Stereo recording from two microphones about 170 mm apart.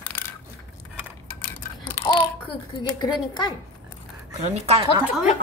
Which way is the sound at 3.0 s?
25° left (ahead or behind).